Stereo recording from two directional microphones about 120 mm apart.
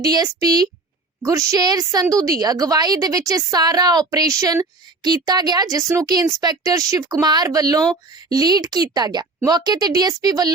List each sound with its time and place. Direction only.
0.0 s a woman's voice: 30° right (ahead or behind)